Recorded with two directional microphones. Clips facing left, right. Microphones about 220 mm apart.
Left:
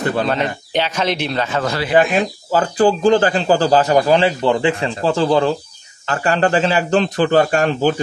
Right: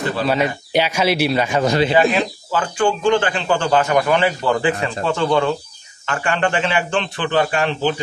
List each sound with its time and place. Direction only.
0.3 s a man's voice: 10° right (ahead or behind)
2.1 s speech: 40° left (ahead or behind)